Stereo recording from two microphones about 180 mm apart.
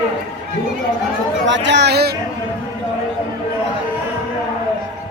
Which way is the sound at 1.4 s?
85° right.